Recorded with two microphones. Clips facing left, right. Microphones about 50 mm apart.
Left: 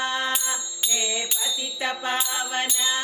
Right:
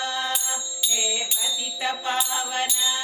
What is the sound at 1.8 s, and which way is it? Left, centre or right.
Music, left.